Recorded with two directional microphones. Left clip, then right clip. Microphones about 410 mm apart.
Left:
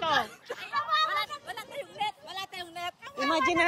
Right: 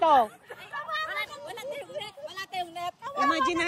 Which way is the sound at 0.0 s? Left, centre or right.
Centre.